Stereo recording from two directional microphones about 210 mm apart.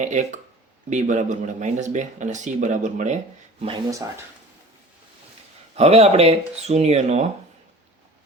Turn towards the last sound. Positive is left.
turn(degrees=-30)  # may be behind; listen again after turning